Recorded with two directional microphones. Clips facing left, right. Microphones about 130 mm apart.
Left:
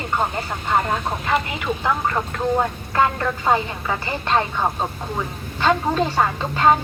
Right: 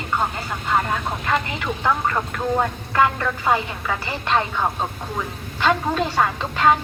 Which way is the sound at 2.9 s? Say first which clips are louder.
Even; 20° left (ahead or behind).